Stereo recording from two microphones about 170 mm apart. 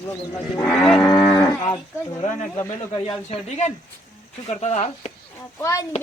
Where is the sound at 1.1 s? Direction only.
15° left (ahead or behind).